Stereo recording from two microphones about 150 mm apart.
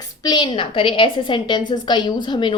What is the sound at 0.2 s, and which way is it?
Speech, 30° left (ahead or behind).